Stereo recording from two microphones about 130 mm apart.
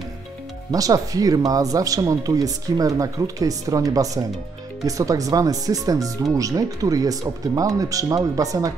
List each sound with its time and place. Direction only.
0.7 s speech: 30° right (ahead or behind)